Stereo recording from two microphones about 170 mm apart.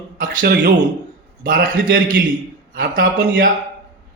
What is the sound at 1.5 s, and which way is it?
A man's voice, 55° right (ahead or behind).